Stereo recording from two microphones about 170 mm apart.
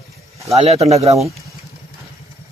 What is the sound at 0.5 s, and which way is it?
Speech, 40° right (ahead or behind).